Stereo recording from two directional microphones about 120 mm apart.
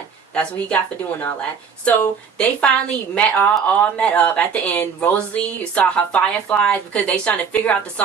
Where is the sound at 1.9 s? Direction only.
10° left (ahead or behind).